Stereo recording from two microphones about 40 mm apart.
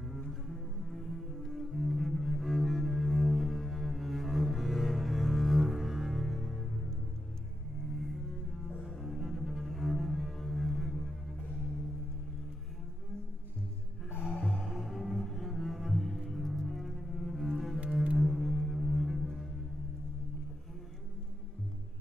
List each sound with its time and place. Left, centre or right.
0.3 s cello: centre
8.8 s cello: centre
14.4 s music: centre